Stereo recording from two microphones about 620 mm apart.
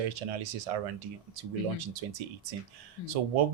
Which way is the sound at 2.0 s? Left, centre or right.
Right.